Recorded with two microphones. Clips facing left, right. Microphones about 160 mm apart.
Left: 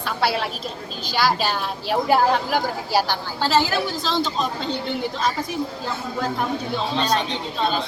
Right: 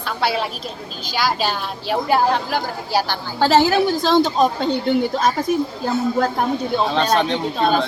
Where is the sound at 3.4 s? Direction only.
55° right (ahead or behind).